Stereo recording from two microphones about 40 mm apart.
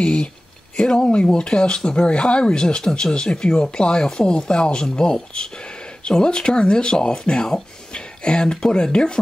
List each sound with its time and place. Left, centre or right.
0.0 s speech: left